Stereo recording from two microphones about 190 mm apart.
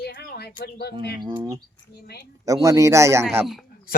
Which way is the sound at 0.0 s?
55° left (ahead or behind).